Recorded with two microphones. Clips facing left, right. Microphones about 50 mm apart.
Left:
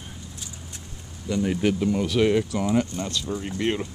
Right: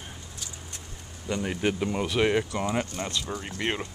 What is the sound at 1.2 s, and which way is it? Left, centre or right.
Speech, centre.